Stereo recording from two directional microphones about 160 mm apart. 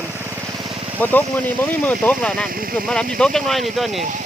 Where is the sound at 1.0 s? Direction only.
10° left (ahead or behind).